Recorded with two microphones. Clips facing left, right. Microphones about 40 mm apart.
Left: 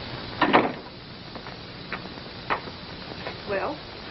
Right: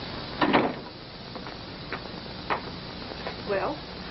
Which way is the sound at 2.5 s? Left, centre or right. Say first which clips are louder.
Left 2 dB; centre.